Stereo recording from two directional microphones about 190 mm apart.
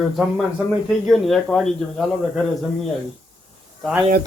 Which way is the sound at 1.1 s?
Centre (ahead or behind).